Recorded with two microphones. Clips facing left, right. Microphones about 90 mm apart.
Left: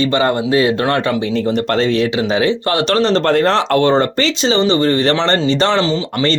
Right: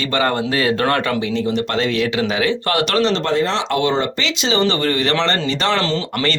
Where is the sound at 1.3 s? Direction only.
45° left (ahead or behind).